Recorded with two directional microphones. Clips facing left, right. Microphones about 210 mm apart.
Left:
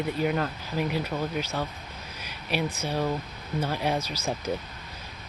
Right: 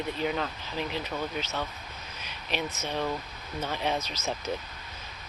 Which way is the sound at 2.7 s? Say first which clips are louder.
Left 3 dB; 10° left (ahead or behind).